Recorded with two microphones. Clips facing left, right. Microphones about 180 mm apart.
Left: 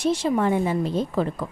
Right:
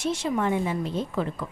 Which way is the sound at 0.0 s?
35° left (ahead or behind).